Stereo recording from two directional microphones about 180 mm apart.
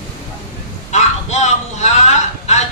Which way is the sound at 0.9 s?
40° left (ahead or behind).